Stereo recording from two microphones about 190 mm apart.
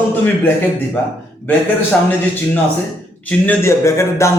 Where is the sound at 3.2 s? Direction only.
10° left (ahead or behind).